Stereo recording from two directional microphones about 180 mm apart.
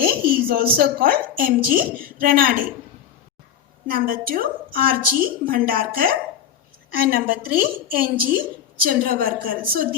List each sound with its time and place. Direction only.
0.0 s a woman's voice: 55° right (ahead or behind)
3.8 s a woman's voice: 50° right (ahead or behind)